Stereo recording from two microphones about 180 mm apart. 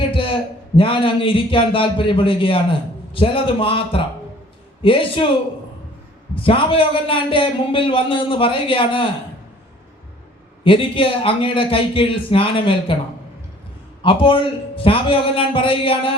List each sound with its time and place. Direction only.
0.1 s a sound: 30° left (ahead or behind)
0.8 s a man's voice: 30° left (ahead or behind)
6.3 s a man's voice: 30° left (ahead or behind)
10.6 s a man's voice: 30° left (ahead or behind)
14.0 s a man's voice: 30° left (ahead or behind)